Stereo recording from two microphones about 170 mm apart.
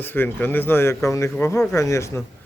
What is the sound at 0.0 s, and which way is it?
Speech, 10° left (ahead or behind).